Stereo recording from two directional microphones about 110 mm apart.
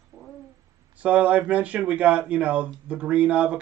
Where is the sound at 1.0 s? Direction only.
10° right (ahead or behind).